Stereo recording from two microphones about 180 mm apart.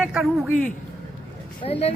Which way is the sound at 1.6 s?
35° left (ahead or behind).